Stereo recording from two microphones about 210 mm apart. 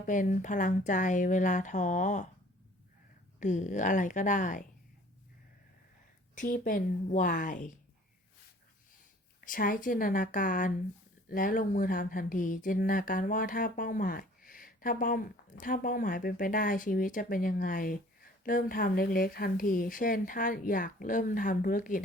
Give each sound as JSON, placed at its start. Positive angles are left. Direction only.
{"t": 0.0, "sound": "speech", "side_deg": 40}
{"t": 3.4, "sound": "speech", "side_deg": 35}
{"t": 6.3, "sound": "speech", "side_deg": 40}
{"t": 9.4, "sound": "speech", "side_deg": 40}